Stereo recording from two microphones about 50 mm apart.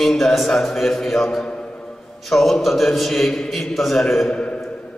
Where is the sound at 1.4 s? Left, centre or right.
Centre.